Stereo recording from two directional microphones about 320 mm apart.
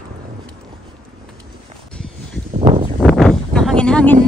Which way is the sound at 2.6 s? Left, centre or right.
Centre.